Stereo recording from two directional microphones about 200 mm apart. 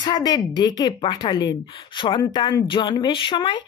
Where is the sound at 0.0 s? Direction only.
20° left (ahead or behind).